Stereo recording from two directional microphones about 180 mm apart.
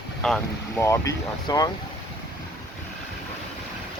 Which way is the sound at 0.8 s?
15° left (ahead or behind).